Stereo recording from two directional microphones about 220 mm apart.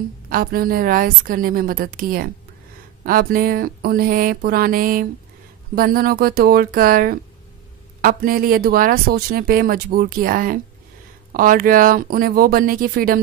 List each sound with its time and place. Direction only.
0.3 s speech: 40° right (ahead or behind)